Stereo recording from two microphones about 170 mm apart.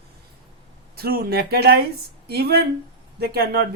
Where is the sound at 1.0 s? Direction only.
65° right (ahead or behind).